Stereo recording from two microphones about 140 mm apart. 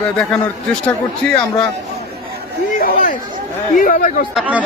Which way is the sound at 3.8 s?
85° left.